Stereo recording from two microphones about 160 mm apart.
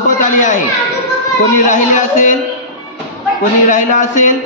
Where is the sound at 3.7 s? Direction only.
50° left (ahead or behind).